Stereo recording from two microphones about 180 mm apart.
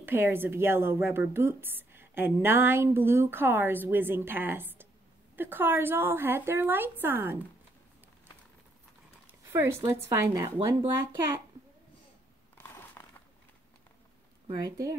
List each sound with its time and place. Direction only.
0.0 s a woman's voice: 10° right (ahead or behind)
9.5 s a woman's voice: 15° right (ahead or behind)
13.0 s a sound: 15° left (ahead or behind)
14.5 s speech: 20° right (ahead or behind)